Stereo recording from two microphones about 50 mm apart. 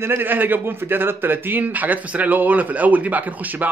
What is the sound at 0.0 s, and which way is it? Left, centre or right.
A man's voice, right.